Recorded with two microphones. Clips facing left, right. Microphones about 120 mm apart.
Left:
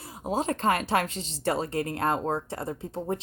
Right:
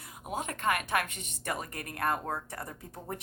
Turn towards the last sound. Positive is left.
turn(degrees=25)  # may be behind; listen again after turning